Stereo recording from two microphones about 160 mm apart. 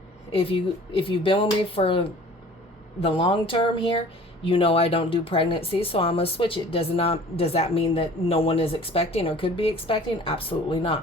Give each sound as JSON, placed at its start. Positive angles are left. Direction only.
{"t": 0.3, "sound": "speech", "side_deg": 35}